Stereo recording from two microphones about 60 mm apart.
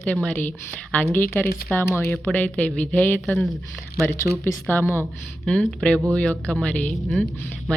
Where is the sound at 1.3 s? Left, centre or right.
Left.